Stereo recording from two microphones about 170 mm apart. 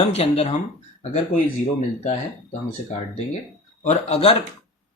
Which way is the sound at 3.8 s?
35° left (ahead or behind).